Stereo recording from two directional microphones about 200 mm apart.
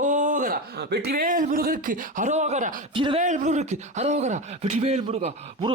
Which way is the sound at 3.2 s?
40° right (ahead or behind).